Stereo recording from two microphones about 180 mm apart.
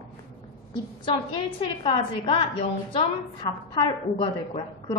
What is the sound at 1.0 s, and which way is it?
A woman's voice, 25° left (ahead or behind).